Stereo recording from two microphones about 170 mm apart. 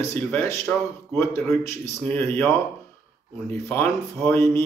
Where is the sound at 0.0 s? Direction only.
15° left (ahead or behind).